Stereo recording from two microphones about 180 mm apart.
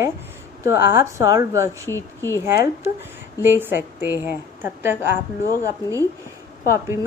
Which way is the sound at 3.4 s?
10° right (ahead or behind).